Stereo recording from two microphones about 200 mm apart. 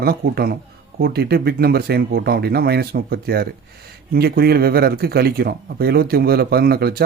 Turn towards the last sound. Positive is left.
turn(degrees=-50)  # may be behind; listen again after turning